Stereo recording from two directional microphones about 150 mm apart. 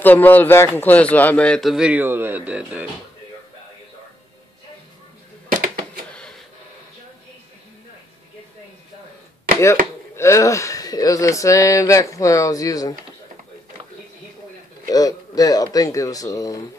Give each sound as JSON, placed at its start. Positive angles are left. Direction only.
{"t": 0.0, "sound": "a man's voice", "side_deg": 10}
{"t": 10.1, "sound": "speech", "side_deg": 20}
{"t": 14.9, "sound": "speech", "side_deg": 25}